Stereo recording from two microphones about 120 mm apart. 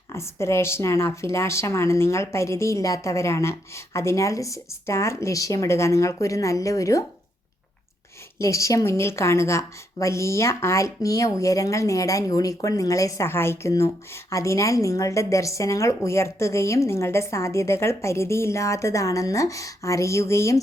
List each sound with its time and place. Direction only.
0.1 s a woman's voice: 25° left (ahead or behind)
8.4 s a woman's voice: 25° left (ahead or behind)